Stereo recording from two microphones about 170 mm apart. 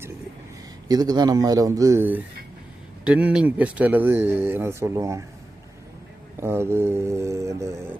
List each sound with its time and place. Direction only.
0.9 s a man's voice: 20° right (ahead or behind)
6.4 s speech: 15° right (ahead or behind)